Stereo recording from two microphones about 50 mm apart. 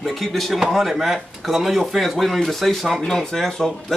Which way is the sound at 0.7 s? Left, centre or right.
Centre.